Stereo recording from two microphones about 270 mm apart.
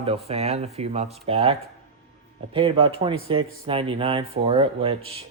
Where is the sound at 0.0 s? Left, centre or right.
Right.